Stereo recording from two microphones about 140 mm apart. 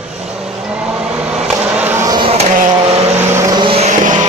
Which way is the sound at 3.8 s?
60° right (ahead or behind).